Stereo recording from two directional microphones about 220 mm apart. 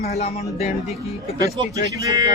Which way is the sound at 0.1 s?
30° left (ahead or behind).